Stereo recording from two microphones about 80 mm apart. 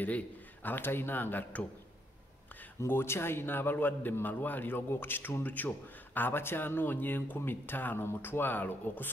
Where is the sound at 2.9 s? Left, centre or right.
Left.